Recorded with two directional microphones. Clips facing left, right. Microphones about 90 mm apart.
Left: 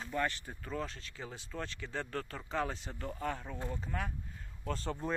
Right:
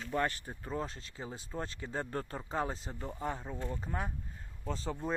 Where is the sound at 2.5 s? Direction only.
35° right (ahead or behind).